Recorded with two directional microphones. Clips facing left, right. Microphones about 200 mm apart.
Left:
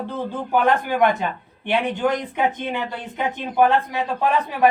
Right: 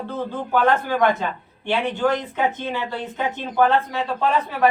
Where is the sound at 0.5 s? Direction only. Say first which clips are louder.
Even; 15° left (ahead or behind).